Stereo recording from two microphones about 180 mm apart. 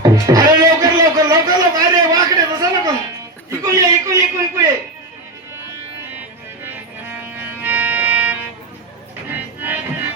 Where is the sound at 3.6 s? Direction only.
15° right (ahead or behind).